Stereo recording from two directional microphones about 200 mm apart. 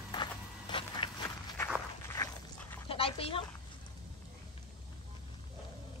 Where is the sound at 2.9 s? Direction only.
30° left (ahead or behind).